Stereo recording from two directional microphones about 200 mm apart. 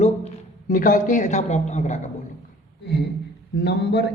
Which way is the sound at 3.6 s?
60° left (ahead or behind).